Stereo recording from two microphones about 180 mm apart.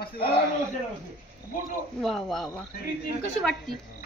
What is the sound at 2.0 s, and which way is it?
A woman's voice, centre (ahead or behind).